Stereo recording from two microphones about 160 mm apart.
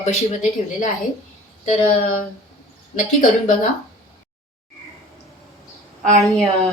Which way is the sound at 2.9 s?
50° left (ahead or behind).